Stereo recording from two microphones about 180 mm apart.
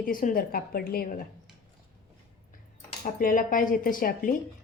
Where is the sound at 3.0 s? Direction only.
50° left (ahead or behind).